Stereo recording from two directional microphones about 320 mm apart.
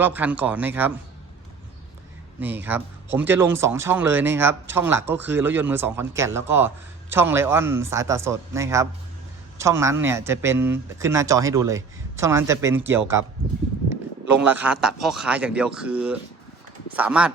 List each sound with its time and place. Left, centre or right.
0.0 s speech: centre
2.4 s speech: centre
14.3 s speech: centre